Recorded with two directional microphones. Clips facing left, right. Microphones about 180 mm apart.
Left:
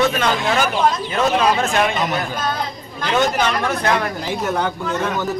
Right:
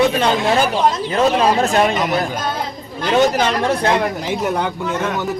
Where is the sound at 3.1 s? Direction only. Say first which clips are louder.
Right 3 dB; 35° right (ahead or behind).